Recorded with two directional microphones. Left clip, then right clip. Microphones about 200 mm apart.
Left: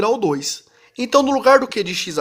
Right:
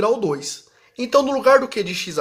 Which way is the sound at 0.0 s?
35° left (ahead or behind).